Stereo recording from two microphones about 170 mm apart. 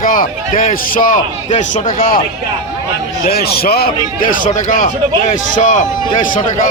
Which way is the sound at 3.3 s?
65° left (ahead or behind).